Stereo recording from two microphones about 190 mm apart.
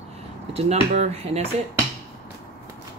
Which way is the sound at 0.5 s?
35° right (ahead or behind).